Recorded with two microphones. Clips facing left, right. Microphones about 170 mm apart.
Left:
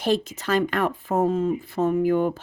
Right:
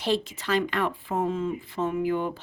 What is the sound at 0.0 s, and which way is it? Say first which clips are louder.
Speech: left 3 dB; 45° left (ahead or behind).